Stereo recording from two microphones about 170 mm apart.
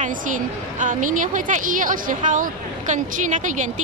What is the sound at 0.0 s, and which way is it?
A woman's voice, 50° right (ahead or behind).